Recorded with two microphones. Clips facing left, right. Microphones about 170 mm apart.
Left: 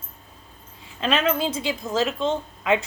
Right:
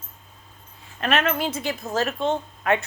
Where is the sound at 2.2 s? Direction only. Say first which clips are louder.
Even; 90° left.